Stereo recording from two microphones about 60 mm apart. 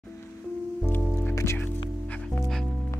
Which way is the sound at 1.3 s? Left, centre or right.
Left.